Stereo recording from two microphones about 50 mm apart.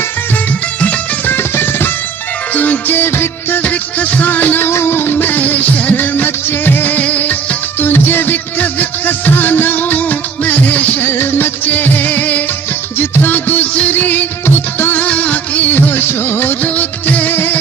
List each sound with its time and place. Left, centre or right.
1.3 s music: left
2.6 s music: left
3.6 s music: left
4.6 s music: left
5.1 s music: left
7.8 s music: left
11.0 s music: left
13.0 s music: left
13.3 s music: left
14.4 s music: left
14.9 s music of bollywood: left
16.6 s music of bollywood: left
17.3 s music: left